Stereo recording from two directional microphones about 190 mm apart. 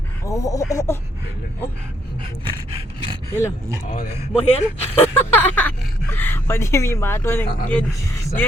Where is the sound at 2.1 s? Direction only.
30° right (ahead or behind).